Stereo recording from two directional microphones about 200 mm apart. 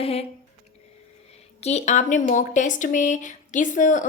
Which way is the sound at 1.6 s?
35° left (ahead or behind).